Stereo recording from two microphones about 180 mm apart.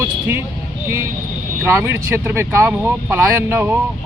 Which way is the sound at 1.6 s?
15° right (ahead or behind).